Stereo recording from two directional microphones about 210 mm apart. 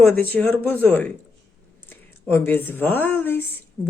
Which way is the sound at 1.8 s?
10° left (ahead or behind).